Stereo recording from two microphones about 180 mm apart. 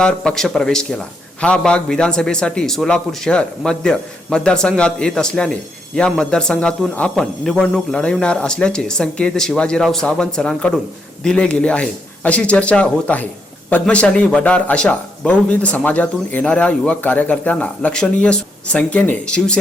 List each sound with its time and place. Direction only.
0.0 s a man's voice: 5° left (ahead or behind)